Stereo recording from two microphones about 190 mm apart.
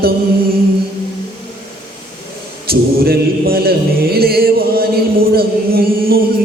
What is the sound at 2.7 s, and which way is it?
Chant, 55° right (ahead or behind).